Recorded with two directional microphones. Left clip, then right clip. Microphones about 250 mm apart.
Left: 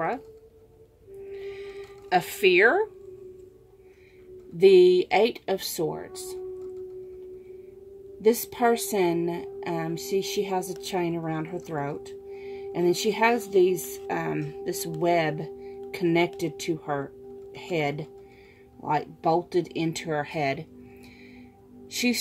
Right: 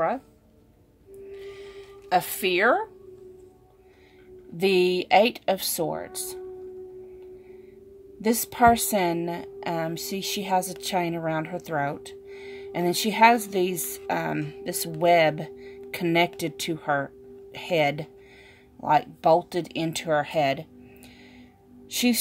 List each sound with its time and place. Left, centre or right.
1.3 s music: right
4.6 s a woman's voice: right
8.2 s a woman's voice: right